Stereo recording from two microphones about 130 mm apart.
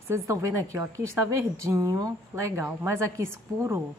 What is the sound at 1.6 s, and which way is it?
A woman's voice, 25° right (ahead or behind).